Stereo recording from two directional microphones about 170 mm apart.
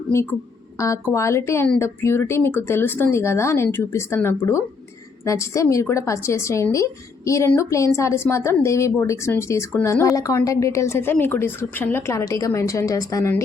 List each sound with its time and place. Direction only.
0.8 s a woman's voice: 15° left (ahead or behind)